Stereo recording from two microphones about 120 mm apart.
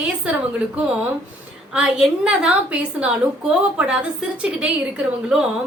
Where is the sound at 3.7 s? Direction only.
10° right (ahead or behind).